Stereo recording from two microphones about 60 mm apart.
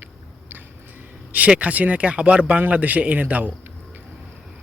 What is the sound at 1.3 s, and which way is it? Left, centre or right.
Speech, right.